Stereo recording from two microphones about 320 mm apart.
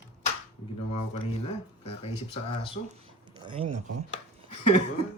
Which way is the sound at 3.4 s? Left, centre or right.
Centre.